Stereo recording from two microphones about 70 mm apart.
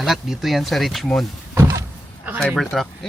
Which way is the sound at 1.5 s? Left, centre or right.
Right.